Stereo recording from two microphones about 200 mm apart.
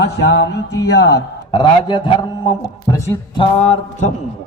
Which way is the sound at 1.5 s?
20° left (ahead or behind).